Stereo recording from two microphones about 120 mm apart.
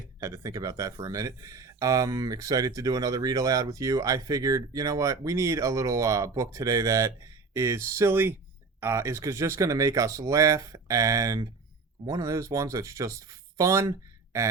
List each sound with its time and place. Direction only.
0.2 s speech: 25° right (ahead or behind)